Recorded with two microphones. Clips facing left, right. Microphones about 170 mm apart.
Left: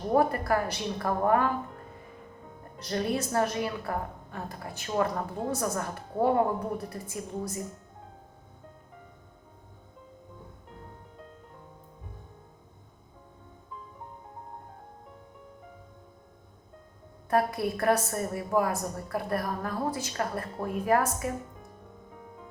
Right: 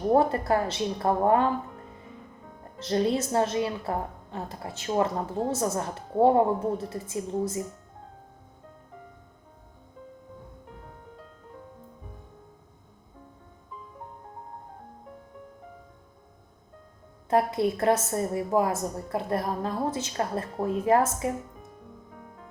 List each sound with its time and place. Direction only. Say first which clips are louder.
0.1 s a woman's voice: right 2 dB; 25° right (ahead or behind)
2.7 s a woman's voice: right 5 dB; 25° right (ahead or behind)
17.2 s a woman's voice: right 3 dB; 20° right (ahead or behind)